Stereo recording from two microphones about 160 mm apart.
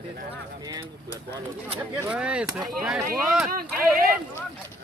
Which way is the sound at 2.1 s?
5° right (ahead or behind).